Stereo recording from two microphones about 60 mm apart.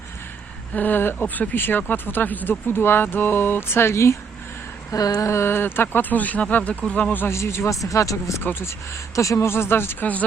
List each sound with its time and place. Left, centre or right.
0.7 s speech: left
4.9 s a sound: left
5.3 s speech: left
7.3 s speech: left
8.4 s speech: left
9.1 s speech: left